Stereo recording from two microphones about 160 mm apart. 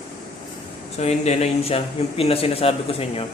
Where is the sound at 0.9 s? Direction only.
45° left (ahead or behind).